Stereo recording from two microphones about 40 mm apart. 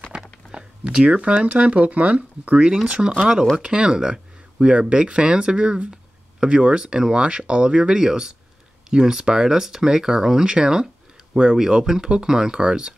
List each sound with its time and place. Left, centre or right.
0.1 s speech: right
3.1 s speech: centre